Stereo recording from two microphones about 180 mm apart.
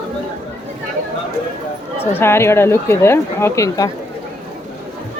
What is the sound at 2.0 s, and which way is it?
Speech, 10° left (ahead or behind).